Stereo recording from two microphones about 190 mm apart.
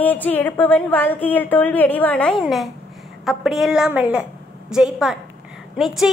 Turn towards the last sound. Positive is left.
turn(degrees=-5)  # may be behind; listen again after turning